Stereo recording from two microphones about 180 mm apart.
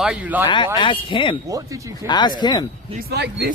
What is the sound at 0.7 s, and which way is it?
Speech, 25° left (ahead or behind).